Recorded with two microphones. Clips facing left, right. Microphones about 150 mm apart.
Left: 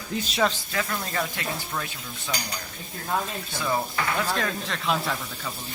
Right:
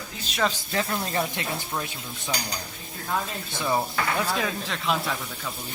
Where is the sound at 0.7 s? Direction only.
25° right (ahead or behind).